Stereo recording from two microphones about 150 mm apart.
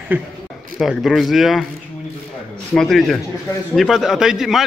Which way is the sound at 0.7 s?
Centre (ahead or behind).